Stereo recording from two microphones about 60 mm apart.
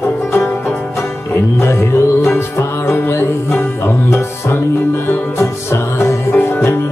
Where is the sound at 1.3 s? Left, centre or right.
Left.